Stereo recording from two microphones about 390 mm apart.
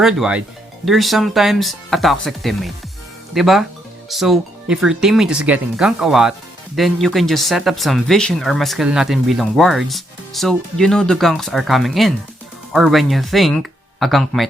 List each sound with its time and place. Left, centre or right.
0.0 s speech: centre